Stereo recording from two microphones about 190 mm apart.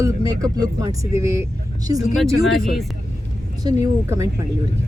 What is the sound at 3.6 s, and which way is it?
Speech, 15° right (ahead or behind).